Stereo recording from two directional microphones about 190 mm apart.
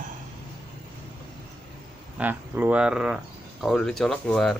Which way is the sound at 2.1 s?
10° right (ahead or behind).